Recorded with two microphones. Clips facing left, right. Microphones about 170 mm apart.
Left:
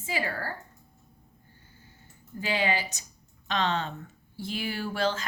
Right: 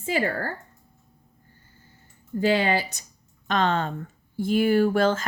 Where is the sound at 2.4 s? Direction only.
60° right (ahead or behind).